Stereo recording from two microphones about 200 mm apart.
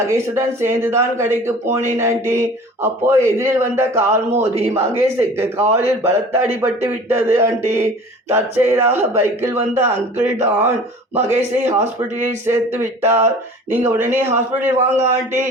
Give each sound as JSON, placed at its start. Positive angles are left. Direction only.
{"t": 0.1, "sound": "speech", "side_deg": -15}
{"t": 4.3, "sound": "a man's voice", "side_deg": -35}
{"t": 4.7, "sound": "speech", "side_deg": -15}